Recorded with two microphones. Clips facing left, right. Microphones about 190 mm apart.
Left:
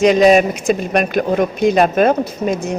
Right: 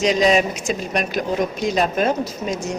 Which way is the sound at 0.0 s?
55° left (ahead or behind).